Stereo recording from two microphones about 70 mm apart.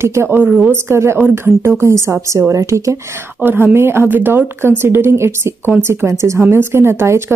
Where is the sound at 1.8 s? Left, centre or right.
Right.